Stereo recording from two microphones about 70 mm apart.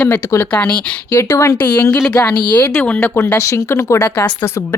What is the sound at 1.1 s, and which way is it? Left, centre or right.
Speech, left.